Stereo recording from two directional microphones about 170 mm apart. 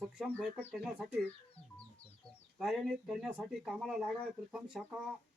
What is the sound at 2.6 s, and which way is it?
Speech, centre (ahead or behind).